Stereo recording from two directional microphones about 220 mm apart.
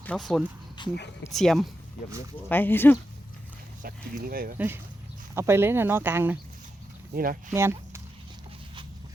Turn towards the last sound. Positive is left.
turn(degrees=-10)  # may be behind; listen again after turning